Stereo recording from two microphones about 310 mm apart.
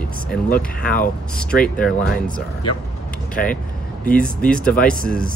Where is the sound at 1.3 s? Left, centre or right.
Centre.